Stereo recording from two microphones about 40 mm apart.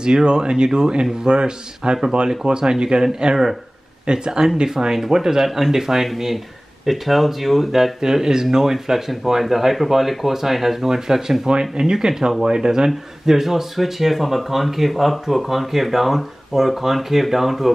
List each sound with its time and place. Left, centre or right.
0.0 s a man's voice: right; by 17.7 s centre